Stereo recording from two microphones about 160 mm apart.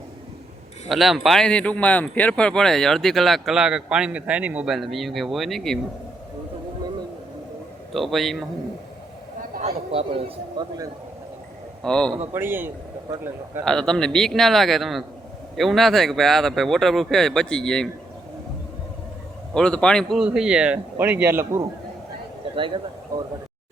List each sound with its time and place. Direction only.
0.9 s speech: centre (ahead or behind)
7.9 s speech: centre (ahead or behind)
9.9 s speech: 35° right (ahead or behind)
11.8 s speech: 5° left (ahead or behind)
12.3 s a man's voice: 15° right (ahead or behind)
13.7 s speech: 5° left (ahead or behind)
19.5 s speech: 5° left (ahead or behind); by 21.6 s 15° right (ahead or behind)
22.5 s speech: 30° right (ahead or behind)